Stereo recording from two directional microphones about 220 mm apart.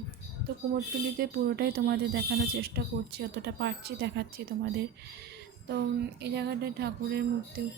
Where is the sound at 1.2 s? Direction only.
45° right (ahead or behind).